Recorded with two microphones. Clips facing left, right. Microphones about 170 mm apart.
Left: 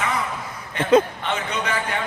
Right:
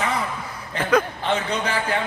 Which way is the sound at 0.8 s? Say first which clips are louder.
Left 3 dB; 25° left (ahead or behind).